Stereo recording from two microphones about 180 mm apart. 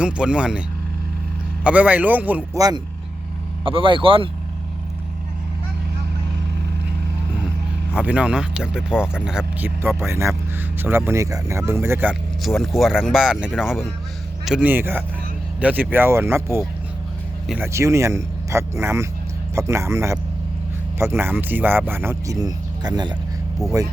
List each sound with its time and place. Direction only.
0.0 s speech: 5° right (ahead or behind)
1.6 s speech: 10° right (ahead or behind)
3.6 s speech: 30° right (ahead or behind)
7.9 s speech: 5° right (ahead or behind); by 23.1 s 25° right (ahead or behind)